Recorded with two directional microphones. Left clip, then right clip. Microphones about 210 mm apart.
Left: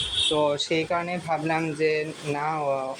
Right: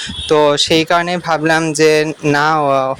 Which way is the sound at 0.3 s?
35° right (ahead or behind).